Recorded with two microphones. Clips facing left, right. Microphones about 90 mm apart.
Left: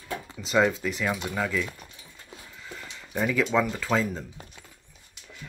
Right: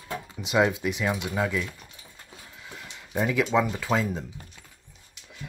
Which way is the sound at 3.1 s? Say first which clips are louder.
Right 1 dB; 20° right (ahead or behind).